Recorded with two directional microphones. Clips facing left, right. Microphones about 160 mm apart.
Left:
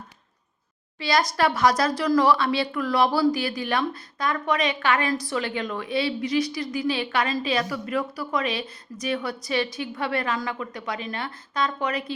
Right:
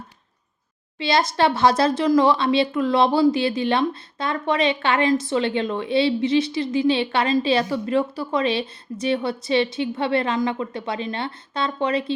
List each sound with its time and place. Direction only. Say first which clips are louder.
0.9 s speech: right 3 dB; 25° right (ahead or behind)